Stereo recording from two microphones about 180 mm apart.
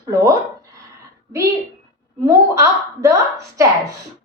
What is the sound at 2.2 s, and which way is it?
A woman's voice, 15° right (ahead or behind).